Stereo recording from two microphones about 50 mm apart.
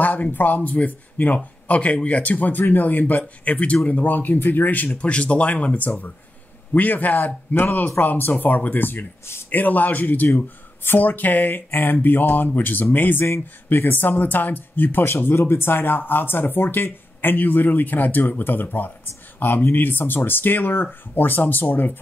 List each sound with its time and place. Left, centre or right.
0.0 s speech: left
4.9 s speech: left